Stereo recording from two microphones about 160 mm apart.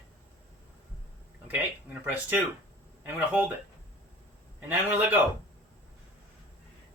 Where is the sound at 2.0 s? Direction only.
10° right (ahead or behind).